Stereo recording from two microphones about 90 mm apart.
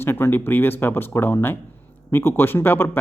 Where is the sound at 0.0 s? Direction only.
25° left (ahead or behind).